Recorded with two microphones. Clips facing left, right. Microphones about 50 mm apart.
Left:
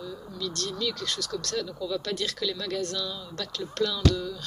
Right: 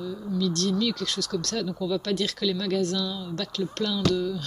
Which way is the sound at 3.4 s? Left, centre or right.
Right.